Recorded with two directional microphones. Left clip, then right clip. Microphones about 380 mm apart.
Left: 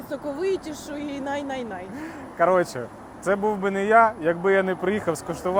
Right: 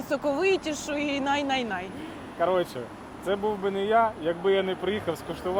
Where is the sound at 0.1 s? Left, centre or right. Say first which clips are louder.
Right 2 dB; centre.